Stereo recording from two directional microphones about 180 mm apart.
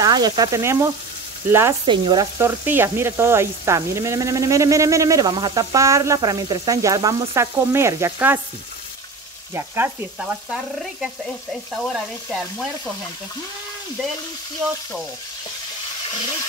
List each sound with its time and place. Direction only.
0.0 s sizzle: 20° right (ahead or behind)
1.5 s speech: 15° right (ahead or behind)
9.5 s speech: 15° right (ahead or behind)
10.5 s frying: centre (ahead or behind)